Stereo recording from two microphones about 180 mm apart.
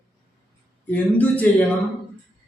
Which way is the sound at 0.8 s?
10° left (ahead or behind).